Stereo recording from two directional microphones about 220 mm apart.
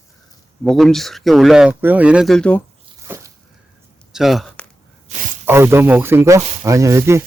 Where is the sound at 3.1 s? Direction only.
10° right (ahead or behind).